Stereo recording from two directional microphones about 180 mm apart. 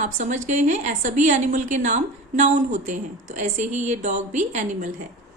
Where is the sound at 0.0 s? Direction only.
45° right (ahead or behind).